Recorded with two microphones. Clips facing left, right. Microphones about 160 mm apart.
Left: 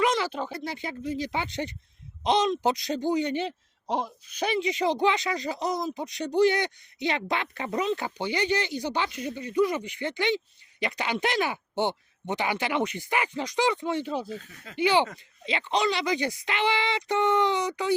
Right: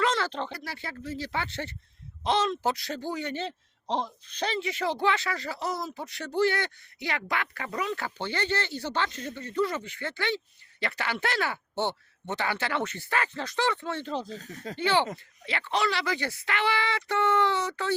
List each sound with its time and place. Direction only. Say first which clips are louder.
0.0 s a sound: left 2 dB; 15° left (ahead or behind)
0.5 s a man's voice: left 5 dB; 20° left (ahead or behind)
14.3 s speech: right 1 dB; 40° right (ahead or behind)
14.8 s a man's voice: left 3 dB; 15° left (ahead or behind)